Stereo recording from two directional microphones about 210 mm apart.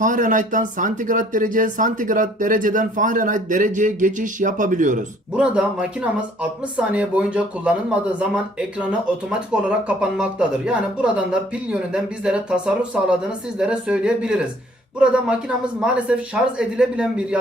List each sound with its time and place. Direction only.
0.0 s speech: 40° right (ahead or behind)
5.4 s speech: 5° right (ahead or behind)